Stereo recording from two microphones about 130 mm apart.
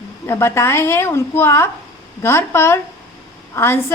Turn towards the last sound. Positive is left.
turn(degrees=20)  # may be behind; listen again after turning